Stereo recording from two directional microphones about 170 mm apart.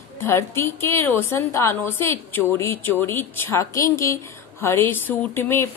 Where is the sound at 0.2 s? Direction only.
15° left (ahead or behind).